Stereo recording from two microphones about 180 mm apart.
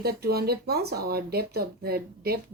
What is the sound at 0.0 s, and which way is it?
Speech, 60° right (ahead or behind).